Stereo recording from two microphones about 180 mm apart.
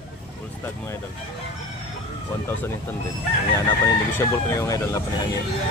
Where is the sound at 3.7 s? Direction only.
15° left (ahead or behind).